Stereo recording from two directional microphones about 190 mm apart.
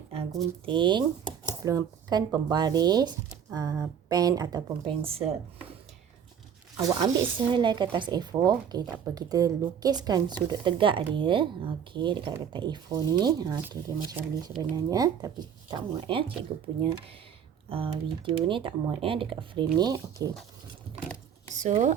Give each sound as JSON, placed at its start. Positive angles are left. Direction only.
{"t": 0.6, "sound": "speech", "side_deg": -25}
{"t": 6.7, "sound": "speech", "side_deg": -20}
{"t": 17.7, "sound": "speech", "side_deg": -30}
{"t": 21.6, "sound": "speech", "side_deg": -40}